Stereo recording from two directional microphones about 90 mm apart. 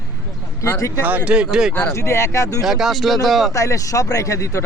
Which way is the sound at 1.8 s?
30° left (ahead or behind).